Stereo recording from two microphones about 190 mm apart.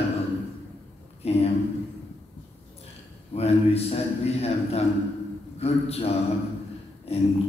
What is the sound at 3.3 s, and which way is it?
A man's voice, 35° left (ahead or behind).